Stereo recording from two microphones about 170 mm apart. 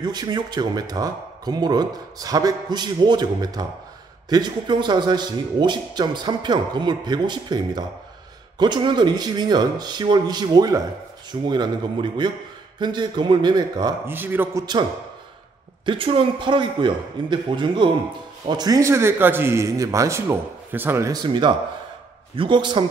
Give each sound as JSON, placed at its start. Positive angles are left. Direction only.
{"t": 0.0, "sound": "speech", "side_deg": -25}
{"t": 14.1, "sound": "a man's voice", "side_deg": -10}
{"t": 15.8, "sound": "a man's voice", "side_deg": -30}